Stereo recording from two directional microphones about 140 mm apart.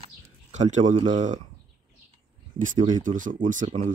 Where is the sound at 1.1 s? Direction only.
65° right (ahead or behind).